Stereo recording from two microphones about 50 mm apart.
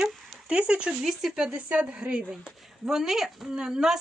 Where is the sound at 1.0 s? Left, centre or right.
Centre; by 2.2 s right.